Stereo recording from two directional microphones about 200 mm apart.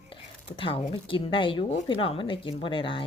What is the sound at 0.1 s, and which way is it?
Speech, 25° left (ahead or behind).